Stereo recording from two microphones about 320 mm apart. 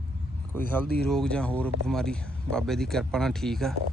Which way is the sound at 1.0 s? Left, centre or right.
Centre.